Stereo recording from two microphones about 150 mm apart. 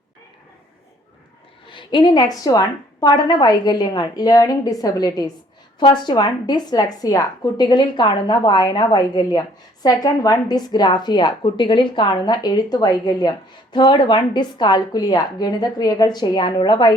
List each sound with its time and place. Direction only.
1.6 s a woman's voice: 35° left (ahead or behind)